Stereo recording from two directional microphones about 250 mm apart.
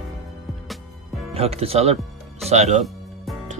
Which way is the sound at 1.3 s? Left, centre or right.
Right.